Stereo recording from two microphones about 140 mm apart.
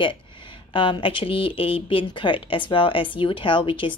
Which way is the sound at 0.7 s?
35° left (ahead or behind).